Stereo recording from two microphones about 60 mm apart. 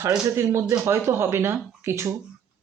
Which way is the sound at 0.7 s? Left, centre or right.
Right.